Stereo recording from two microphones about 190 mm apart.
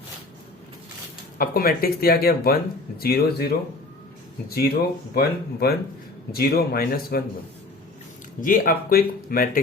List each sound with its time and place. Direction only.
1.4 s speech: 50° left (ahead or behind)
8.4 s speech: 45° left (ahead or behind)